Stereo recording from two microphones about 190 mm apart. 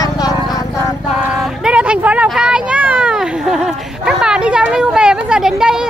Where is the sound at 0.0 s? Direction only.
20° left (ahead or behind).